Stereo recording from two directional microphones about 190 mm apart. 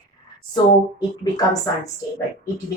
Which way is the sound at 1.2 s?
20° left (ahead or behind).